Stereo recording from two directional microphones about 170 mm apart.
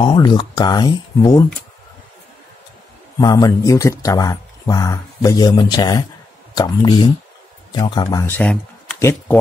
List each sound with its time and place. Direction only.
0.0 s speech: 25° left (ahead or behind)
3.2 s speech: 25° left (ahead or behind)